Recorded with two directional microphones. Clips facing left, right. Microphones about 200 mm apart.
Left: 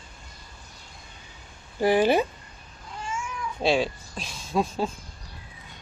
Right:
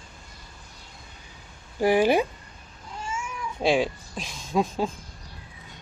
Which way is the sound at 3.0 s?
10° right (ahead or behind).